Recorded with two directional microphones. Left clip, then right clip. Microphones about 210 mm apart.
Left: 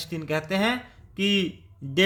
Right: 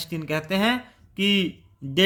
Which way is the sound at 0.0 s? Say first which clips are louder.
Even; 20° right (ahead or behind).